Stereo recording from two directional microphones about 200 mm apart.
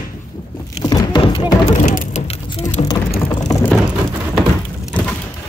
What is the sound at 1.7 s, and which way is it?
Vehicle, 40° left (ahead or behind).